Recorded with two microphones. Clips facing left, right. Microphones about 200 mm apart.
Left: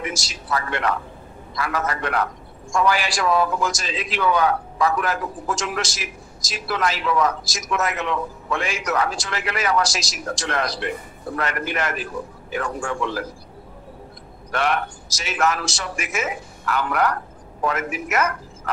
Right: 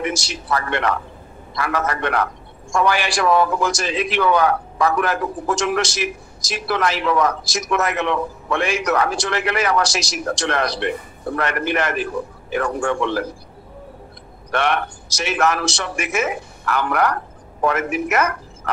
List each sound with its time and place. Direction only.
0.0 s a man's voice: 65° right (ahead or behind)
14.5 s a man's voice: 65° right (ahead or behind)